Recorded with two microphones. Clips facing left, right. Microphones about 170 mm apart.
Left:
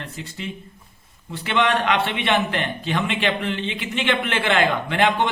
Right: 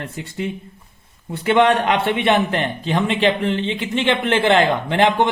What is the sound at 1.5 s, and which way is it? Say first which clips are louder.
A man's voice: right 5 dB; 45° right (ahead or behind).